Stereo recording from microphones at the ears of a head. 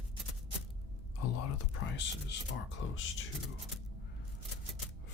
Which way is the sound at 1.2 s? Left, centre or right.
Left.